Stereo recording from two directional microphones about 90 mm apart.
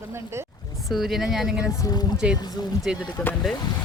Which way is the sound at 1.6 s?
40° left (ahead or behind).